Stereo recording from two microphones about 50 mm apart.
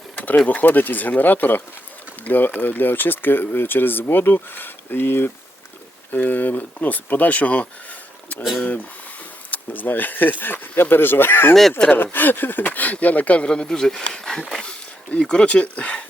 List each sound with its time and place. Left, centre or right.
0.2 s speech: left
6.1 s speech: left